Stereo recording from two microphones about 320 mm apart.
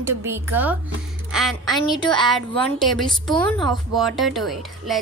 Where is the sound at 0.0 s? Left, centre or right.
Centre.